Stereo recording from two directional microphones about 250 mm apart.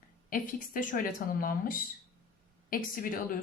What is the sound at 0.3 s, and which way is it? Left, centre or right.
Speech, left.